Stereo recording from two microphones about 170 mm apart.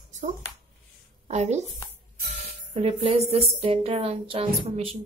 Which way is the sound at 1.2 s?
40° right (ahead or behind).